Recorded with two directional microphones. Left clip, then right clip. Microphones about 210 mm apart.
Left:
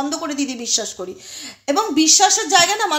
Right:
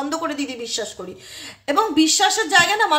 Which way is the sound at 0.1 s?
30° left (ahead or behind).